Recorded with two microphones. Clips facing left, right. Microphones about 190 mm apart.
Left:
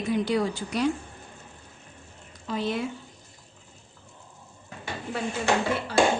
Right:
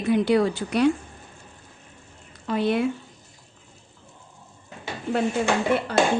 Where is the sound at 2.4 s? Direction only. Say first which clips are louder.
Right 6 dB; 60° right (ahead or behind).